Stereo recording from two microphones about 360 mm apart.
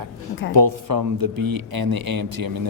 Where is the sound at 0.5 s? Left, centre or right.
Right.